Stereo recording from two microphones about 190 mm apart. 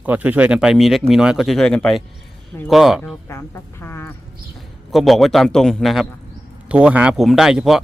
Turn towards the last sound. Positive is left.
turn(degrees=0)  # may be behind; listen again after turning